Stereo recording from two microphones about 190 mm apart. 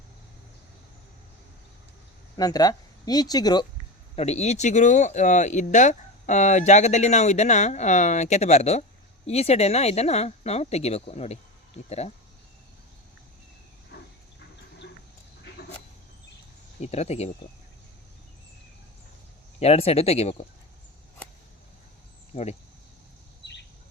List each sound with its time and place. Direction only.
2.3 s speech: 20° left (ahead or behind)
4.1 s speech: 35° left (ahead or behind)
13.9 s dog: 65° left (ahead or behind)
16.8 s speech: 35° left (ahead or behind)
19.5 s speech: 35° left (ahead or behind)
22.3 s speech: 35° left (ahead or behind)